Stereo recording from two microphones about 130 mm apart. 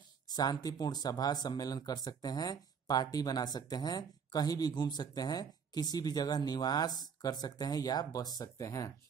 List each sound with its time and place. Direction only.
0.3 s speech: 30° left (ahead or behind)